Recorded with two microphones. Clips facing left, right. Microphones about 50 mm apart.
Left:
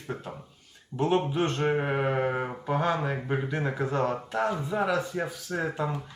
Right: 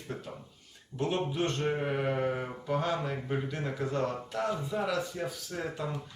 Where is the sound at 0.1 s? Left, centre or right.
Left.